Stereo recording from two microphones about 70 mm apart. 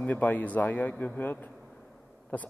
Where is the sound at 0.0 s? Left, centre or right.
Left.